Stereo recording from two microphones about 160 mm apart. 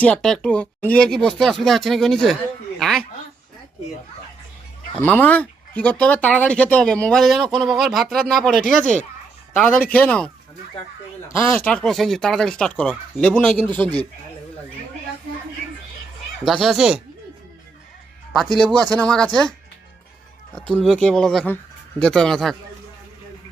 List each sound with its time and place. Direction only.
0.0 s speech: 5° left (ahead or behind)
4.9 s speech: 10° left (ahead or behind)
11.3 s speech: 10° left (ahead or behind)
13.8 s speech: 25° right (ahead or behind)
16.4 s speech: centre (ahead or behind)
18.9 s speech: 5° left (ahead or behind)
20.8 s speech: 5° left (ahead or behind)